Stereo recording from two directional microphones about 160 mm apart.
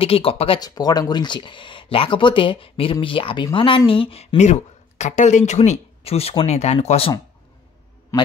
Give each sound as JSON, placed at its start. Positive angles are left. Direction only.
{"t": 0.0, "sound": "speech", "side_deg": 35}
{"t": 0.6, "sound": "a woman's voice", "side_deg": 25}
{"t": 8.1, "sound": "a man's voice", "side_deg": 20}